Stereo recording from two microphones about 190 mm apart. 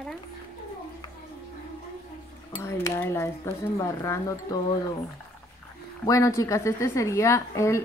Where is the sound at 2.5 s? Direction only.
15° left (ahead or behind).